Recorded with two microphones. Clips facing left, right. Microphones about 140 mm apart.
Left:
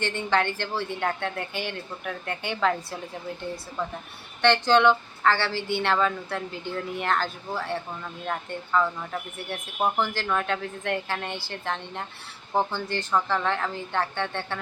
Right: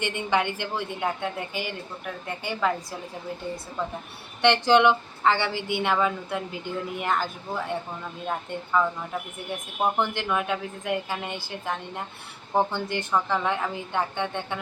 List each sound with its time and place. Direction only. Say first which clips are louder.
0.0 s a woman's voice: even; 15° right (ahead or behind)
4.4 s a woman's voice: right 1 dB; 20° right (ahead or behind)
8.3 s a woman's voice: even; 5° right (ahead or behind)